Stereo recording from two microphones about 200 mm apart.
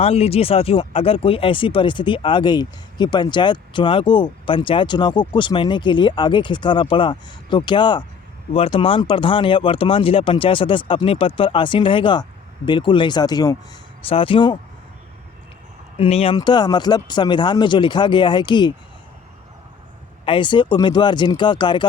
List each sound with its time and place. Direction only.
0.0 s speech: 30° left (ahead or behind)
16.0 s speech: 30° left (ahead or behind)
20.2 s speech: 25° left (ahead or behind)